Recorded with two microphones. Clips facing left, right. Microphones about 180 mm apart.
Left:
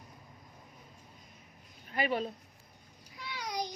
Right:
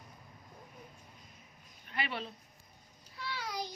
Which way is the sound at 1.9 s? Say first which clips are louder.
Left 7 dB; 45° left (ahead or behind).